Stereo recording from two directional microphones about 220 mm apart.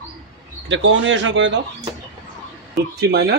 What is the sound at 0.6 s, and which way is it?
Speech, 60° right (ahead or behind).